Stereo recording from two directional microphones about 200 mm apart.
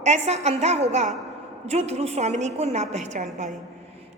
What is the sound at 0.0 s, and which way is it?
A woman's voice, 35° right (ahead or behind).